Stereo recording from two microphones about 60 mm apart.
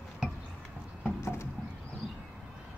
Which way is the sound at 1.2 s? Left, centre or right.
Left.